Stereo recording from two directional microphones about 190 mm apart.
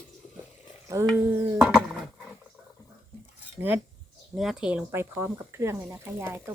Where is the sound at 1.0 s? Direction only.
15° right (ahead or behind).